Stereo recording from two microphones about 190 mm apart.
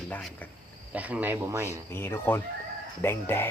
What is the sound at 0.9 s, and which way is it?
Speech, 5° right (ahead or behind).